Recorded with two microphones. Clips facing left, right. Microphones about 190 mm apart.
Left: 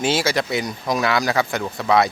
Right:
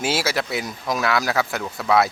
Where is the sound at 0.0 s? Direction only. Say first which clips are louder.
Left 3 dB; 5° right (ahead or behind).